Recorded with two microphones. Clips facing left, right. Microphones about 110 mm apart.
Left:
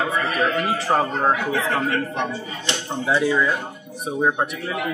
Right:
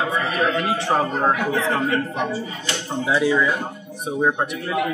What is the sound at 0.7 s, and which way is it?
Speech, centre (ahead or behind).